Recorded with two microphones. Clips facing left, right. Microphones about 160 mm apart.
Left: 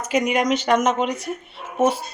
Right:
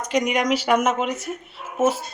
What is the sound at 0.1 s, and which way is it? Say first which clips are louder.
Speech: left 1 dB; centre (ahead or behind).